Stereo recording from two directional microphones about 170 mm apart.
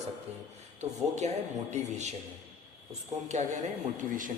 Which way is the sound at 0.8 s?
45° right (ahead or behind).